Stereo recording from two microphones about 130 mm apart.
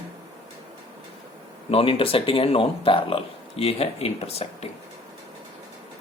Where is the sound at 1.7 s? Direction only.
45° left (ahead or behind).